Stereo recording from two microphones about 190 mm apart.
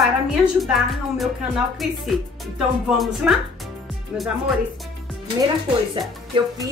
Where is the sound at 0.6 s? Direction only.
Centre (ahead or behind).